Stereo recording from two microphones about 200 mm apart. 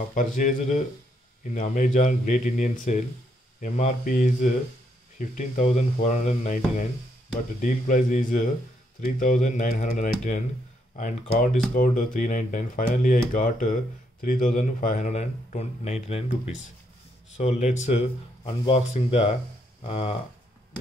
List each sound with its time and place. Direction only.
0.1 s speech: 40° left (ahead or behind)
17.4 s speech: 35° left (ahead or behind)